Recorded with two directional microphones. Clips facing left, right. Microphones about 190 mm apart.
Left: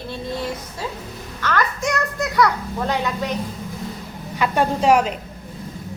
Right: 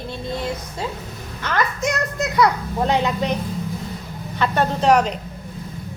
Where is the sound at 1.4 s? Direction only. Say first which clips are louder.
Even; 20° right (ahead or behind).